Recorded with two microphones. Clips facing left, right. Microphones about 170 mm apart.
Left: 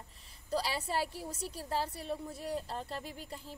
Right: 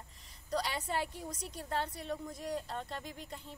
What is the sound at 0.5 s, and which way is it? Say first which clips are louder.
A woman's voice: left 1 dB; 30° left (ahead or behind).